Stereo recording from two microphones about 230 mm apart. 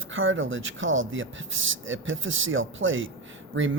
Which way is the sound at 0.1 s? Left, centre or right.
Right.